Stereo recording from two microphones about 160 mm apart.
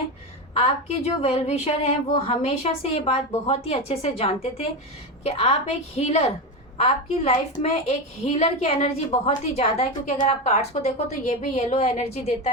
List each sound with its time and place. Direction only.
1.0 s a woman's voice: 40° left (ahead or behind)